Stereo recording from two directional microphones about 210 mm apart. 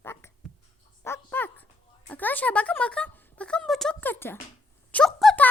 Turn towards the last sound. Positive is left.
turn(degrees=0)  # may be behind; listen again after turning